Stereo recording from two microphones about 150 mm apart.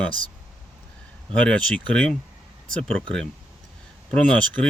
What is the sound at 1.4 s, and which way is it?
Speech, 10° left (ahead or behind).